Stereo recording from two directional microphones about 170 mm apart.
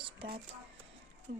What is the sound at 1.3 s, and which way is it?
Speech, 90° right.